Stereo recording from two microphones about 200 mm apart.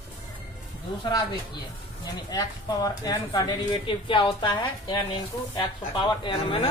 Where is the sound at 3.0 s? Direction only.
20° left (ahead or behind).